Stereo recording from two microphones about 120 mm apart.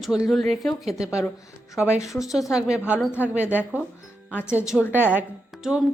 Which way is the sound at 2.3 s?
5° right (ahead or behind).